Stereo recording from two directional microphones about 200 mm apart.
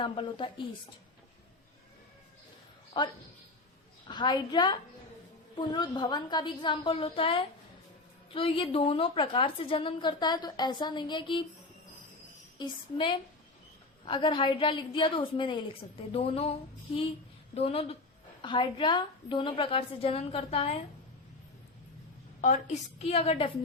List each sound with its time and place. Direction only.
0.0 s a woman's voice: 25° left (ahead or behind)
3.0 s a woman's voice: 25° left (ahead or behind)
12.5 s a woman's voice: 25° left (ahead or behind)
22.4 s a woman's voice: 35° left (ahead or behind)